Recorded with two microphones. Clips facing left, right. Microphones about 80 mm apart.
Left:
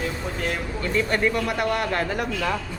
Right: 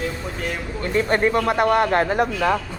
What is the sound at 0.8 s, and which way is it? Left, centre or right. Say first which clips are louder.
Speech: right 4 dB; right.